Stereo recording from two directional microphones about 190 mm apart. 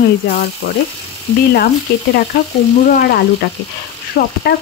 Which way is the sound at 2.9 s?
55° left (ahead or behind).